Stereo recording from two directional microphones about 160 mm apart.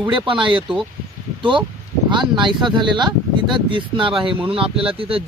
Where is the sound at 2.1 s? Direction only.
30° right (ahead or behind).